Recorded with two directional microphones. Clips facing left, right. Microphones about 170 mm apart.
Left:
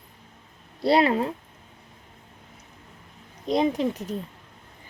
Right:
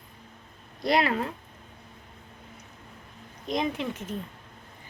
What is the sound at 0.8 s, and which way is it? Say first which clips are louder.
Speech: left 5 dB; 30° left (ahead or behind).